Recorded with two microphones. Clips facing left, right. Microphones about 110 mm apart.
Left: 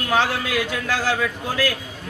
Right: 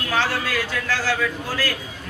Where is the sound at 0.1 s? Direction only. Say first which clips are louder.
Left 2 dB; 15° left (ahead or behind).